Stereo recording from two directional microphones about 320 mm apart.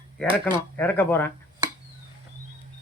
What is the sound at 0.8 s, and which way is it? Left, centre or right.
Speech, centre.